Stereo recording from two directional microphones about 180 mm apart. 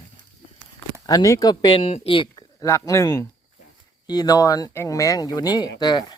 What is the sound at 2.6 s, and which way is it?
Speech, 15° left (ahead or behind).